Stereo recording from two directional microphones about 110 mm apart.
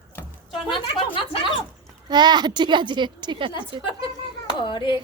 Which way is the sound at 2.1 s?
40° right (ahead or behind).